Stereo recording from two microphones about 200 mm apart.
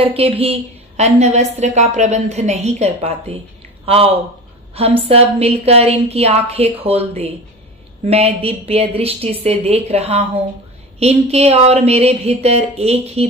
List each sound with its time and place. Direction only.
0.0 s a woman's voice: 30° right (ahead or behind)